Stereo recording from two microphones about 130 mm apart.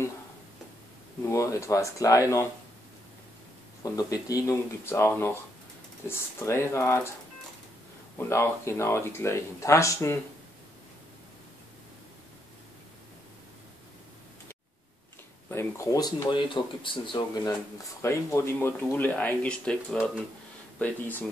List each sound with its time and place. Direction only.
1.3 s speech: 25° left (ahead or behind)
3.8 s speech: 30° left (ahead or behind)
8.2 s speech: 20° left (ahead or behind)
15.5 s speech: 25° left (ahead or behind); by 17.2 s 40° left (ahead or behind)
18.0 s speech: 20° left (ahead or behind)